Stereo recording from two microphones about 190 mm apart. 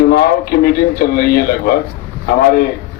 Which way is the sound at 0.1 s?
55° left (ahead or behind).